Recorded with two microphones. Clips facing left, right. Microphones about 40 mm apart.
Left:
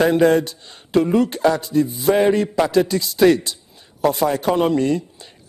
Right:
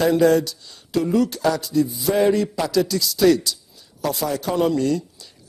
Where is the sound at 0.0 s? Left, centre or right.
Left.